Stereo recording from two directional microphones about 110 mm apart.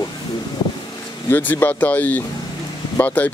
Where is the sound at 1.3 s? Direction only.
15° left (ahead or behind).